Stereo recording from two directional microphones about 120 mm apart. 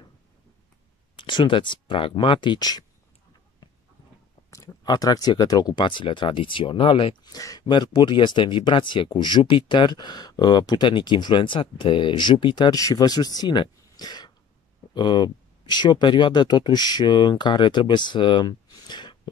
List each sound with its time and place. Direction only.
1.1 s speech: 40° left (ahead or behind)
4.5 s speech: 30° left (ahead or behind); by 7.2 s 50° left (ahead or behind)
7.3 s speech: 30° left (ahead or behind)